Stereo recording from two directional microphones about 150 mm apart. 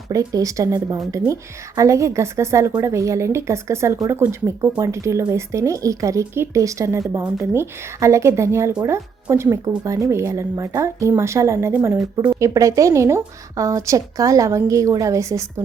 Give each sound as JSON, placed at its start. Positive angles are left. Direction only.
{"t": 0.1, "sound": "a woman's voice", "side_deg": -20}